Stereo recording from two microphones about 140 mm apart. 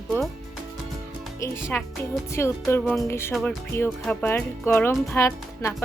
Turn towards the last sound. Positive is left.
turn(degrees=20)  # may be behind; listen again after turning